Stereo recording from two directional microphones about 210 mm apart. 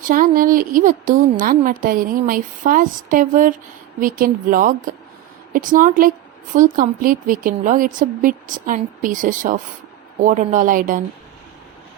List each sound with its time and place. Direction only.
0.1 s a woman's voice: 40° right (ahead or behind)